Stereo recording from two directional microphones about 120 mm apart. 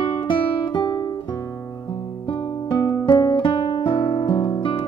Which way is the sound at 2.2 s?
45° left (ahead or behind).